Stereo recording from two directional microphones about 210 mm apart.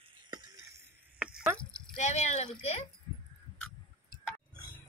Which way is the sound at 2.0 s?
35° left (ahead or behind).